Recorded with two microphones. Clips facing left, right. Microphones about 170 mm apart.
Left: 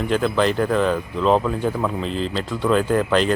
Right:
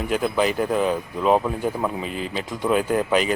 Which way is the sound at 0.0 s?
10° right (ahead or behind).